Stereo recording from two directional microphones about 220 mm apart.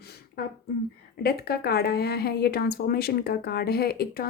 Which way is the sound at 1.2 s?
45° left (ahead or behind).